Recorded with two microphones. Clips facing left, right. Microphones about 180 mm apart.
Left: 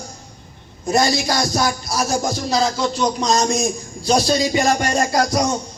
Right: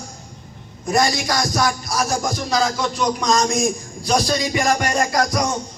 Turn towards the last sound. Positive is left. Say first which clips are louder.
# left 2 dB
turn(degrees=30)  # may be behind; listen again after turning